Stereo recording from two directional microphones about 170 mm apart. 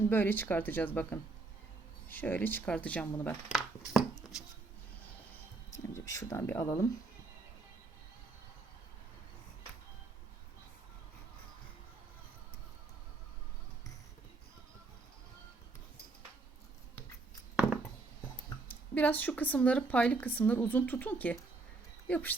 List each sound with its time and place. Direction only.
0.1 s speech: 10° left (ahead or behind)
4.2 s chopping: 5° right (ahead or behind)
5.7 s speech: 15° left (ahead or behind)
18.7 s speech: 10° left (ahead or behind)